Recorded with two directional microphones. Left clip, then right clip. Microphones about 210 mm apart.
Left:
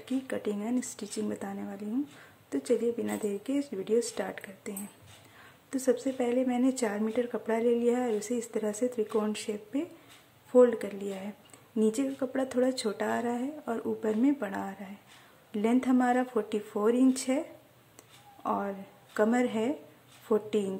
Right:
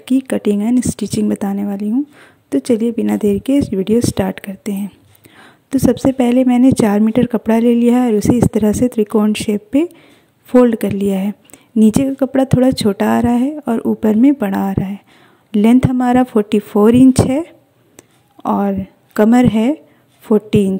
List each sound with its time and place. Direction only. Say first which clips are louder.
0.0 s a woman's voice: right 17 dB; 40° right (ahead or behind)
17.9 s a sound: right 9 dB; 35° right (ahead or behind)
20.2 s a woman's voice: right 14 dB; 40° right (ahead or behind)